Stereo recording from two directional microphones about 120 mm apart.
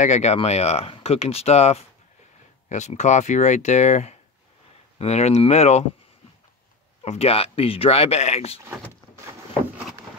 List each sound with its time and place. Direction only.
0.0 s speech: 75° left (ahead or behind)
2.7 s speech: 75° left (ahead or behind)
7.0 s speech: 60° left (ahead or behind)